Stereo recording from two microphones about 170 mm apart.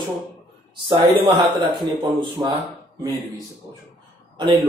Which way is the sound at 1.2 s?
30° right (ahead or behind).